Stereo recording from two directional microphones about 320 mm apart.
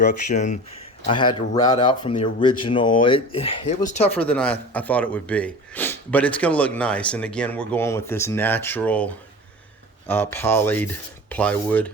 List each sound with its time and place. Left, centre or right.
0.0 s speech: left
4.1 s speech: centre